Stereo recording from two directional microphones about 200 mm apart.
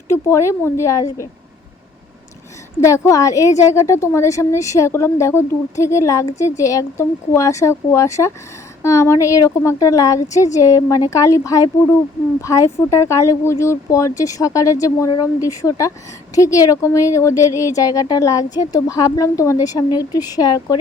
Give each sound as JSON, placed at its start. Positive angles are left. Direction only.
{"t": 0.1, "sound": "a woman's voice", "side_deg": 15}
{"t": 2.8, "sound": "a woman's voice", "side_deg": 15}